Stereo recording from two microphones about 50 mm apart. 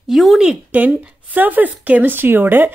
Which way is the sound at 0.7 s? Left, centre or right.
Right.